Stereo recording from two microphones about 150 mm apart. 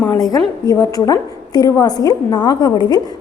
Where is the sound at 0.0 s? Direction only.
20° left (ahead or behind).